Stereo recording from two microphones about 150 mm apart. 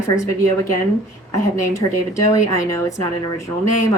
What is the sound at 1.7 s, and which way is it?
Speech, 20° left (ahead or behind).